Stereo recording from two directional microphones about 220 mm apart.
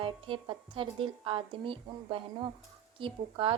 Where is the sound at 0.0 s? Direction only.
25° right (ahead or behind).